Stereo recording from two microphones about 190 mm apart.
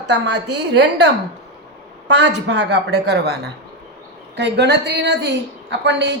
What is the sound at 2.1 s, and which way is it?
A woman's voice, 65° right (ahead or behind).